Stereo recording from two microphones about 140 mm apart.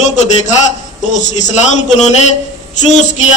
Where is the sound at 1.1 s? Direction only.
60° left (ahead or behind).